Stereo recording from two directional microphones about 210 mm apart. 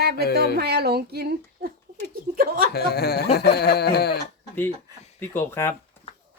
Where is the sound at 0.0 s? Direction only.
50° right (ahead or behind).